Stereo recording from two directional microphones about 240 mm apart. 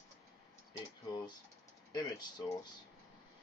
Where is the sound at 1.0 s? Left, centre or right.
Centre.